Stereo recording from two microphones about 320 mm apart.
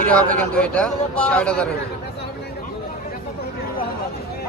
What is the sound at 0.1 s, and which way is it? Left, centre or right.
A man's voice, centre.